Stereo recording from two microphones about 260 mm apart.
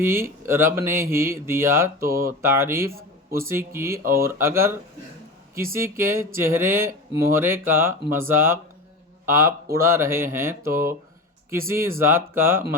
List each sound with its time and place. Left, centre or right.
0.0 s speech: centre
2.9 s a sound: right
3.5 s speech: centre
9.7 s speech: centre